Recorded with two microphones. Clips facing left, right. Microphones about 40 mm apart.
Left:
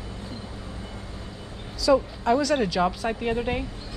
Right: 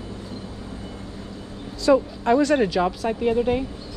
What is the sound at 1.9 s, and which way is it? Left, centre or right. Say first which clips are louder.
Speech: right 3 dB; right.